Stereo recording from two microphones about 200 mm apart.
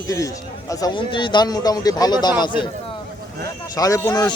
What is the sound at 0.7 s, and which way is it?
Speech, 20° left (ahead or behind).